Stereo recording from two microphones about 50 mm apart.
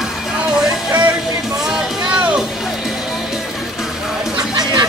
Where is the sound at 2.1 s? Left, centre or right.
Right.